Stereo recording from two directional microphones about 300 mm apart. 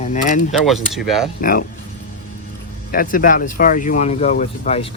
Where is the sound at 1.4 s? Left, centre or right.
Left.